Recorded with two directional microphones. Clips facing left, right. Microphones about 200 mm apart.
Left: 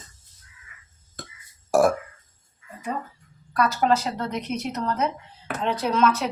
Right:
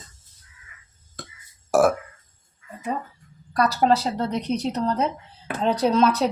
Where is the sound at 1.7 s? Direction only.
Centre (ahead or behind).